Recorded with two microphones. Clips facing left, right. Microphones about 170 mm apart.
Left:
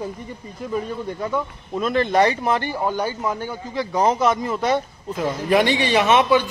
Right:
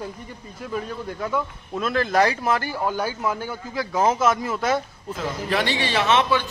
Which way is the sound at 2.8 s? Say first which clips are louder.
Left 2 dB; 15° left (ahead or behind).